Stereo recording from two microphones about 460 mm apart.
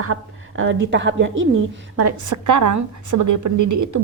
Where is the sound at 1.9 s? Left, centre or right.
Right.